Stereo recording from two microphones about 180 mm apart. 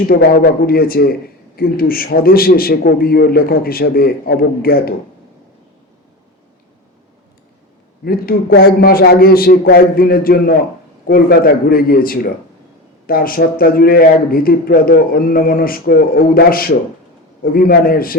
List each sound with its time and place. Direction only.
0.1 s a man's voice: 60° left (ahead or behind)
8.0 s a man's voice: 60° left (ahead or behind)